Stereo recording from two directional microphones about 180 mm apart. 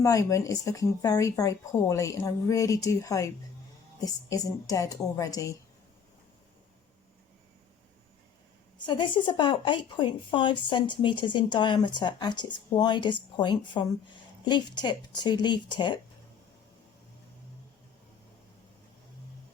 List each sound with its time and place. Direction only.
0.0 s a woman's voice: 20° left (ahead or behind)
8.9 s speech: 25° left (ahead or behind)